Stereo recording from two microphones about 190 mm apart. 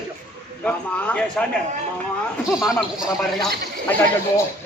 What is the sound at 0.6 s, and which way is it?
Speech, 5° left (ahead or behind).